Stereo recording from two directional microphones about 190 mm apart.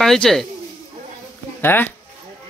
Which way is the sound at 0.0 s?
Centre (ahead or behind).